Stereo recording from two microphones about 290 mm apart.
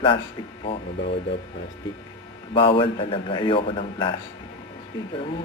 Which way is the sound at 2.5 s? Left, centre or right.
Centre.